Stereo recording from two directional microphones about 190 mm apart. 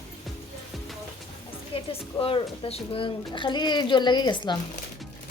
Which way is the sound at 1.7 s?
30° left (ahead or behind).